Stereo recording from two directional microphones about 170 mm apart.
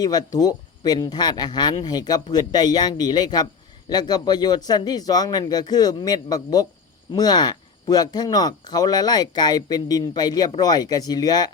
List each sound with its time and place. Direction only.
0.0 s speech: 25° left (ahead or behind)